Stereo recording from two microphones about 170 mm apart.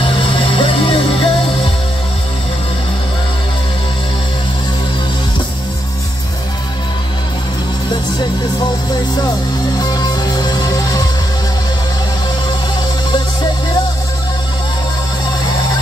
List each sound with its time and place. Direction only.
0.0 s music: 30° left (ahead or behind)
7.9 s music: 25° left (ahead or behind)
9.8 s music: 25° left (ahead or behind)